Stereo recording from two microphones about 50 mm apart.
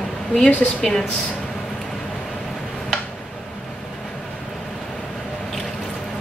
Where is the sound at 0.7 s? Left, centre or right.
Centre.